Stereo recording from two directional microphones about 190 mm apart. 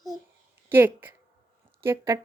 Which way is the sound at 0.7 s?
10° right (ahead or behind).